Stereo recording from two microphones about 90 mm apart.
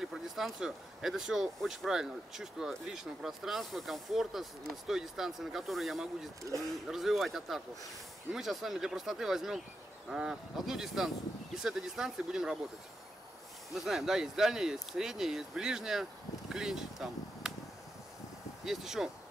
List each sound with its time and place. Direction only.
0.0 s speech: 5° right (ahead or behind)
6.5 s speech: 35° right (ahead or behind)
6.9 s speech: centre (ahead or behind)
13.7 s speech: 5° right (ahead or behind)
18.7 s speech: 5° right (ahead or behind)